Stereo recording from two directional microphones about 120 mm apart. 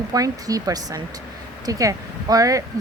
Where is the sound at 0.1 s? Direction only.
30° right (ahead or behind).